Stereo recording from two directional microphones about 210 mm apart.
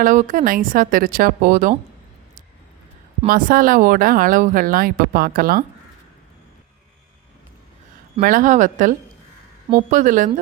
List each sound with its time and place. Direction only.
0.0 s speech: 40° right (ahead or behind)
3.2 s speech: 40° right (ahead or behind)
8.2 s speech: 40° right (ahead or behind)